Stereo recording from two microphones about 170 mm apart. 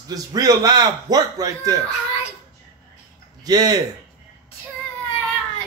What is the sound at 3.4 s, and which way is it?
Speech, 25° right (ahead or behind).